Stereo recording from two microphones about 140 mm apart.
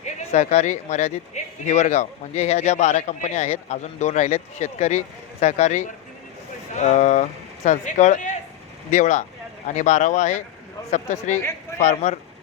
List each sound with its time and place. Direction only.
0.0 s speech: 55° left (ahead or behind)